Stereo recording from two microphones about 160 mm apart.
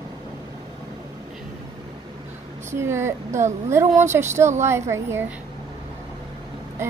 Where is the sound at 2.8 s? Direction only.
15° right (ahead or behind).